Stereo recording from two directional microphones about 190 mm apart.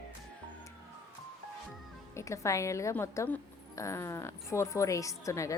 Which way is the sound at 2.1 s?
15° left (ahead or behind).